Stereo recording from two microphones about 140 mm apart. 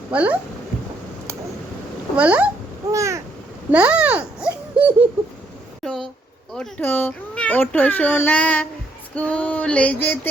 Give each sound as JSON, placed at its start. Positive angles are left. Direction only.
{"t": 0.1, "sound": "speech", "side_deg": -10}
{"t": 2.1, "sound": "speech", "side_deg": -10}
{"t": 2.9, "sound": "a sound", "side_deg": -20}
{"t": 3.7, "sound": "a child's voice", "side_deg": -10}
{"t": 5.8, "sound": "a child's voice", "side_deg": 0}